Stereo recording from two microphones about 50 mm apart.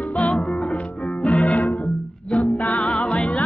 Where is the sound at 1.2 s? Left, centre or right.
Left.